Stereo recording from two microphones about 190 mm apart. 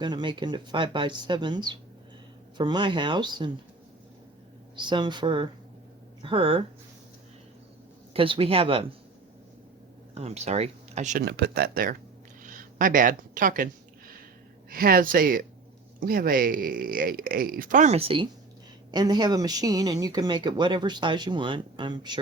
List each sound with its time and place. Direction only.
0.0 s speech: 25° right (ahead or behind)
4.8 s speech: 25° right (ahead or behind)
8.1 s speech: 30° right (ahead or behind)
10.2 s speech: 35° right (ahead or behind)
11.2 s speech: 60° right (ahead or behind)
12.4 s a sound: 45° right (ahead or behind)
14.7 s speech: 50° right (ahead or behind); by 22.2 s 25° right (ahead or behind)